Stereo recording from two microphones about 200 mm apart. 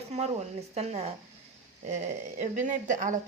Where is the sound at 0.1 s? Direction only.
35° right (ahead or behind).